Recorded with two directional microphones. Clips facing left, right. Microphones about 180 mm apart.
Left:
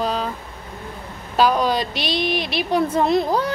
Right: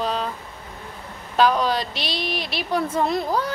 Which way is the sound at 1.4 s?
10° left (ahead or behind).